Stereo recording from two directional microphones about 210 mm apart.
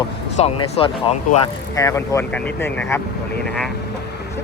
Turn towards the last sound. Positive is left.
turn(degrees=5)  # may be behind; listen again after turning